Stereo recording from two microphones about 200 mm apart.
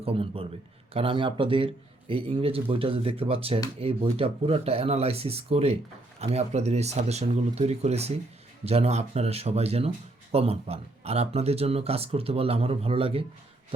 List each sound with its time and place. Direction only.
0.0 s speech: 30° right (ahead or behind)